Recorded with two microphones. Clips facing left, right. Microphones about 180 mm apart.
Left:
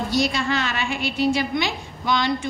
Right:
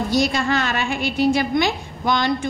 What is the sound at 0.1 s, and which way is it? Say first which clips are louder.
A woman's voice: right 3 dB; 45° right (ahead or behind).